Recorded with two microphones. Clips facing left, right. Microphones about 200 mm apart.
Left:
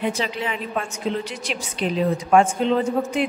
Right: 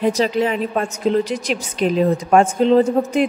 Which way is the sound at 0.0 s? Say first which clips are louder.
Right 8 dB; 40° right (ahead or behind).